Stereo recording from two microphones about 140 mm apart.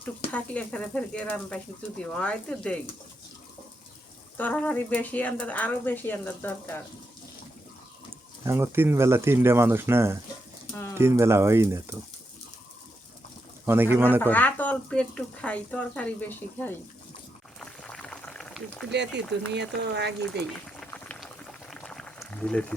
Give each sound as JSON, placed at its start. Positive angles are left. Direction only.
{"t": 0.3, "sound": "speech", "side_deg": 10}
{"t": 4.4, "sound": "speech", "side_deg": 10}
{"t": 8.4, "sound": "speech", "side_deg": -15}
{"t": 13.7, "sound": "speech", "side_deg": -15}
{"t": 14.2, "sound": "speech", "side_deg": 15}
{"t": 17.6, "sound": "boiling", "side_deg": 5}
{"t": 20.3, "sound": "boiling", "side_deg": 5}
{"t": 22.4, "sound": "speech", "side_deg": 5}